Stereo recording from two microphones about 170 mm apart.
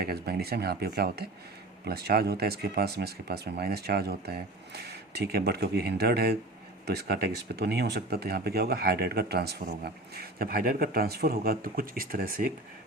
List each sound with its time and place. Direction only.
0.0 s speech: 65° right (ahead or behind)